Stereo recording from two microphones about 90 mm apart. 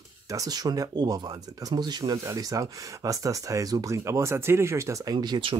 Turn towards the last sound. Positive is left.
turn(degrees=-50)  # may be behind; listen again after turning